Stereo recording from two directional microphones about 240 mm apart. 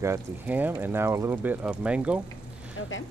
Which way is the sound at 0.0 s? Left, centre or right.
Centre.